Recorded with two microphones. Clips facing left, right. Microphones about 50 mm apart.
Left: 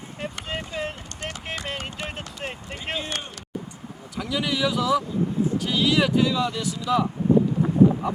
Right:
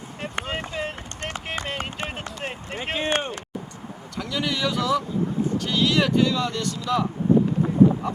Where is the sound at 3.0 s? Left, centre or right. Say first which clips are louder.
Right 7 dB; right.